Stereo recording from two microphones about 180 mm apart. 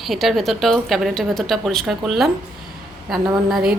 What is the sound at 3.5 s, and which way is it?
Speech, centre (ahead or behind).